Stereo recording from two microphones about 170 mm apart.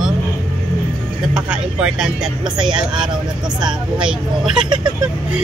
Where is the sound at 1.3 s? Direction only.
5° right (ahead or behind).